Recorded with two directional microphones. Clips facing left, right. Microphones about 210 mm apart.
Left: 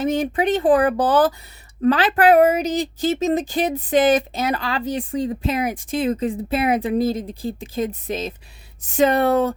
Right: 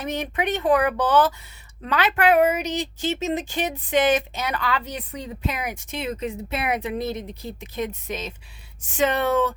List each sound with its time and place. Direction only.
0.0 s a woman's voice: 30° left (ahead or behind)